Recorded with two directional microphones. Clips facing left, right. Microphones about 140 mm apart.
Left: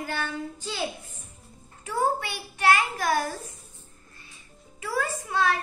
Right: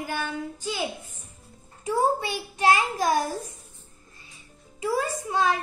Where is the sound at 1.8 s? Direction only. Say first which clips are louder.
Right 3 dB; 15° right (ahead or behind).